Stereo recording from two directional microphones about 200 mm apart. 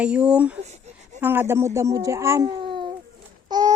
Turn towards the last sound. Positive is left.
turn(degrees=-20)  # may be behind; listen again after turning